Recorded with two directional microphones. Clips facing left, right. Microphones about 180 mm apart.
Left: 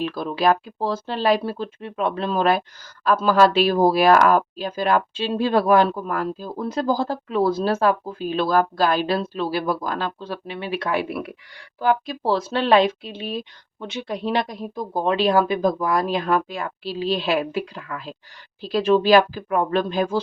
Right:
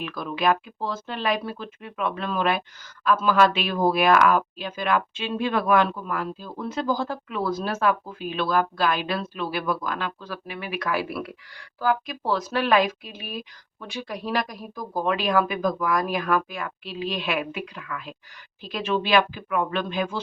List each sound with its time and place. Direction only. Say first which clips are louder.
0.0 s speech: left 4 dB; 30° left (ahead or behind)